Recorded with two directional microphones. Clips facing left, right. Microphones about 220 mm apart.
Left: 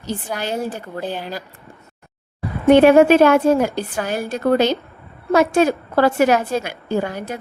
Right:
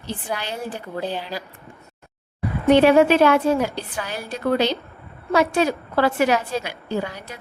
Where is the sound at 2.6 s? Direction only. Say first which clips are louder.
Left 4 dB; 50° left (ahead or behind).